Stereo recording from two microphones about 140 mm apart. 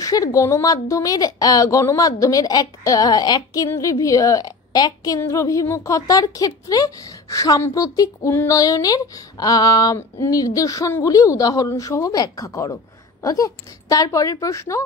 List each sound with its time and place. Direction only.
0.0 s a woman's voice: 25° left (ahead or behind)